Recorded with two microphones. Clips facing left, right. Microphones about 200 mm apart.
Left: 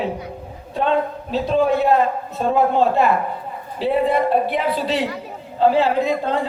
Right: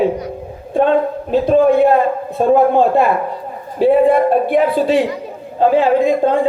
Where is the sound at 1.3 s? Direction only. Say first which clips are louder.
Right 7 dB; 50° right (ahead or behind).